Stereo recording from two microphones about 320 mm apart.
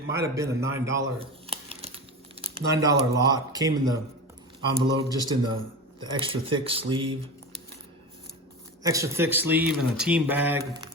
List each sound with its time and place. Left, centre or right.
0.1 s speech: centre
5.1 s speech: centre
8.8 s speech: centre